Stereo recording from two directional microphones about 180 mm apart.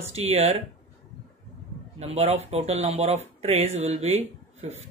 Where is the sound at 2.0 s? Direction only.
35° right (ahead or behind).